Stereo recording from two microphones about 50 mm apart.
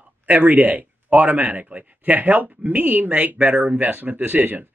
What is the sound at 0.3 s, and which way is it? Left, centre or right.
Speech, right.